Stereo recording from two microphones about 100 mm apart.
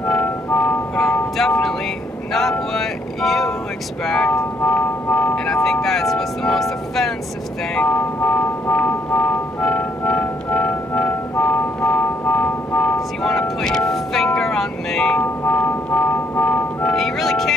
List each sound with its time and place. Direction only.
0.1 s music: 15° left (ahead or behind)
2.7 s vehicle: 5° left (ahead or behind)
4.1 s music: 10° left (ahead or behind)
5.5 s music: 5° left (ahead or behind)
7.7 s music: 15° left (ahead or behind)
13.2 s music: 5° left (ahead or behind)
15.1 s music: 20° left (ahead or behind)
16.9 s music: 5° left (ahead or behind)